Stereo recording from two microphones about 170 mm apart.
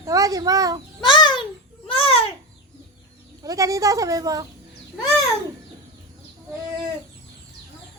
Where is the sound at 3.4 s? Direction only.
20° right (ahead or behind).